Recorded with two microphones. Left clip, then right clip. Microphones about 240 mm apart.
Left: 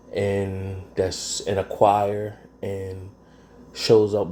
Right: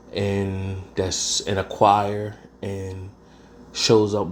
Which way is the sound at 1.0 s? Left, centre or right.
Right.